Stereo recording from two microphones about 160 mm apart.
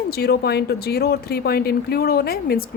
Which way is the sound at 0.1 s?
80° left.